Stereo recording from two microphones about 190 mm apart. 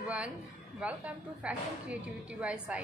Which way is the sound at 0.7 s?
5° right (ahead or behind).